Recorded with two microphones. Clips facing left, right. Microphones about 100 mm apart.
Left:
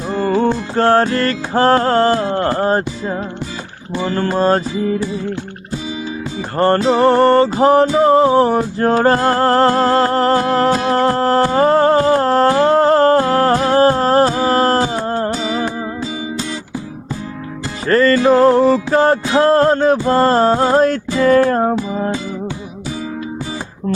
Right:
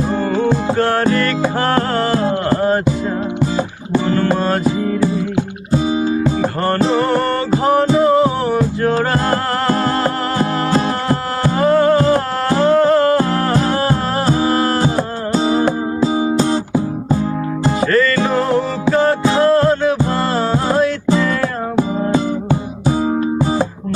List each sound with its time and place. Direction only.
0.3 s music: 35° left (ahead or behind)
4.1 s music: 30° left (ahead or behind)
6.9 s music: 35° left (ahead or behind)
14.8 s music: 40° right (ahead or behind)
17.8 s music: 35° left (ahead or behind)